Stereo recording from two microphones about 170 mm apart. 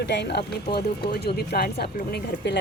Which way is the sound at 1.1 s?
70° left (ahead or behind).